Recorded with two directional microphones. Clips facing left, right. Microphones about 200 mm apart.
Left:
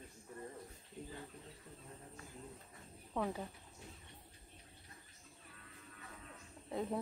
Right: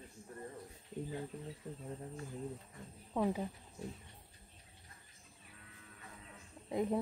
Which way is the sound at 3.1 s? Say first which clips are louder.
Right 5 dB; 15° right (ahead or behind).